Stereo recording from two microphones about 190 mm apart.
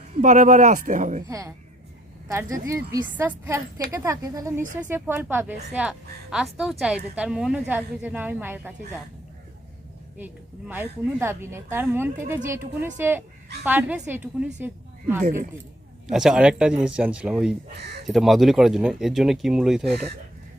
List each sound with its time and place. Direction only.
0.2 s speech: 40° right (ahead or behind)
1.3 s a woman's voice: 15° right (ahead or behind)
10.2 s a woman's voice: 10° right (ahead or behind)
15.2 s speech: 45° right (ahead or behind)
16.0 s speech: 5° right (ahead or behind)